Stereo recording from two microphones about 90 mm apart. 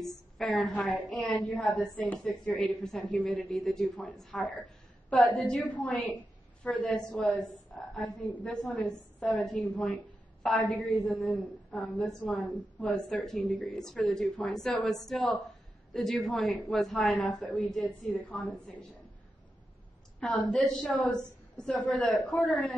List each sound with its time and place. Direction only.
0.1 s a woman's voice: 10° left (ahead or behind)
1.1 s a woman's voice: 5° left (ahead or behind)
2.2 s a woman's voice: 15° left (ahead or behind)
20.2 s a woman's voice: 10° left (ahead or behind)